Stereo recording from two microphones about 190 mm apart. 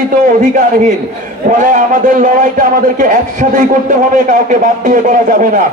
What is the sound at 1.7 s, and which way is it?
A man's voice, 45° right (ahead or behind).